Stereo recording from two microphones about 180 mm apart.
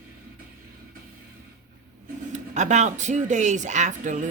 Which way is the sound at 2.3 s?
40° right (ahead or behind).